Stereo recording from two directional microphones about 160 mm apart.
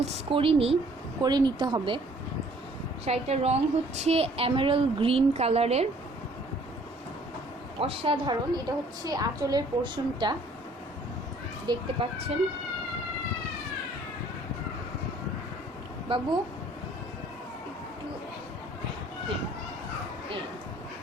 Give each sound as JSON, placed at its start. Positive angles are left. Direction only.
{"t": 0.0, "sound": "a woman's voice", "side_deg": -35}
{"t": 1.2, "sound": "a woman's voice", "side_deg": -25}
{"t": 3.0, "sound": "a woman's voice", "side_deg": -40}
{"t": 7.8, "sound": "a woman's voice", "side_deg": -35}
{"t": 11.6, "sound": "a child's voice", "side_deg": -30}
{"t": 16.1, "sound": "a woman's voice", "side_deg": -35}